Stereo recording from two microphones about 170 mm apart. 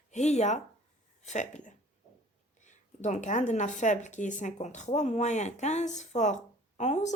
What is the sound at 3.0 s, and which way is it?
Speech, 45° left (ahead or behind).